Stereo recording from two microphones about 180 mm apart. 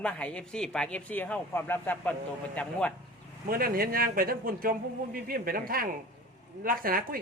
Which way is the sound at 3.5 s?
55° right (ahead or behind).